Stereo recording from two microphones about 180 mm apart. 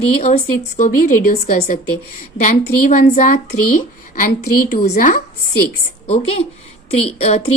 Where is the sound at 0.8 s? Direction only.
45° left (ahead or behind).